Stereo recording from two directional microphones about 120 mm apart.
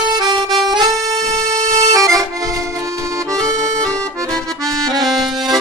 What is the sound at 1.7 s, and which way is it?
Accordion, 25° right (ahead or behind).